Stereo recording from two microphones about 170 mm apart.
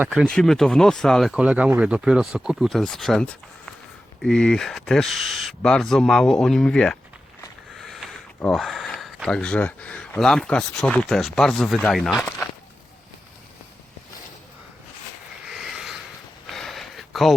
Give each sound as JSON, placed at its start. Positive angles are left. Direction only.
{"t": 0.0, "sound": "speech", "side_deg": -5}
{"t": 7.8, "sound": "sniff", "side_deg": 0}
{"t": 8.4, "sound": "speech", "side_deg": 5}
{"t": 15.4, "sound": "a sound", "side_deg": 0}